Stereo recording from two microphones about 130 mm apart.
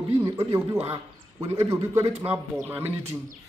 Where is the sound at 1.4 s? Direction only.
50° right (ahead or behind).